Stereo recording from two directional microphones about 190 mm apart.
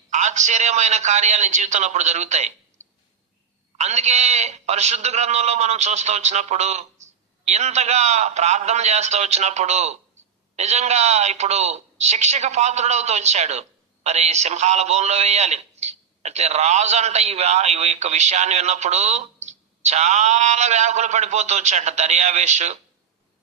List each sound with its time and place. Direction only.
0.1 s a woman's voice: 40° right (ahead or behind)
3.8 s a woman's voice: 35° right (ahead or behind)